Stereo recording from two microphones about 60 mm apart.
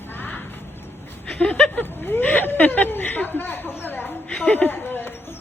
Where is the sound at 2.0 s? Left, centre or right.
Left.